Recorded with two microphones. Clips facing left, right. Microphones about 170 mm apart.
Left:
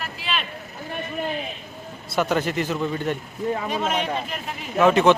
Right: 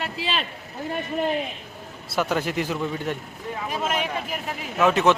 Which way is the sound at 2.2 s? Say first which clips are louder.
Left 2 dB; 5° right (ahead or behind).